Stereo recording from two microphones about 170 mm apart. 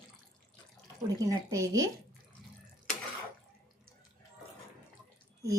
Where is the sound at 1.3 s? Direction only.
20° right (ahead or behind).